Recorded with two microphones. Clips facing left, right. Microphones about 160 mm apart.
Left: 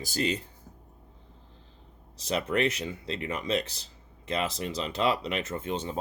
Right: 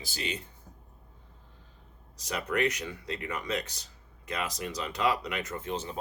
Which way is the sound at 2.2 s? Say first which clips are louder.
Left 2 dB; 30° left (ahead or behind).